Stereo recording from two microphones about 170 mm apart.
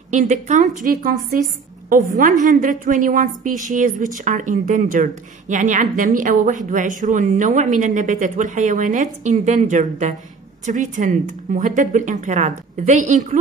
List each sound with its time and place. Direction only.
0.1 s a woman's voice: 45° right (ahead or behind)